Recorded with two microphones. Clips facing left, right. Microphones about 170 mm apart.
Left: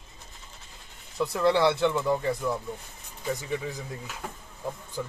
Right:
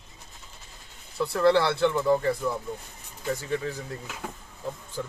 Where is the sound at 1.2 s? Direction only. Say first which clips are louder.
Right 1 dB; 20° left (ahead or behind).